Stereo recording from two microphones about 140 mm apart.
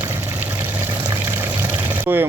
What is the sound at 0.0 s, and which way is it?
Pour, 20° right (ahead or behind).